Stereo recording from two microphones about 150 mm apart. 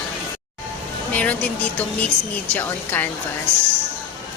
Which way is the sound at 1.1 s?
10° left (ahead or behind).